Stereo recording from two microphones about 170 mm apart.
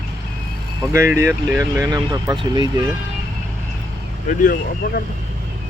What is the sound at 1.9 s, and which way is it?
Speech, 25° right (ahead or behind).